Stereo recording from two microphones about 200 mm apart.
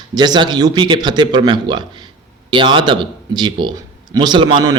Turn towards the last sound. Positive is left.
turn(degrees=-25)  # may be behind; listen again after turning